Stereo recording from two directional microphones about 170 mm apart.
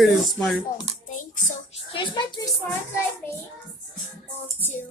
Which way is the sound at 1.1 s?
50° left (ahead or behind).